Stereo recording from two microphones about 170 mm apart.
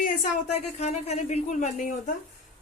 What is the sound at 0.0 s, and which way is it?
A woman's voice, 50° left (ahead or behind).